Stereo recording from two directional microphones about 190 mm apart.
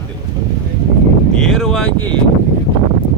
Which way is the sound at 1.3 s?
5° left (ahead or behind).